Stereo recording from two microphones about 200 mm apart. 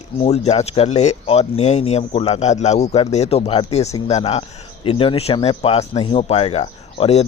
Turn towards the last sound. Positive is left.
turn(degrees=35)  # may be behind; listen again after turning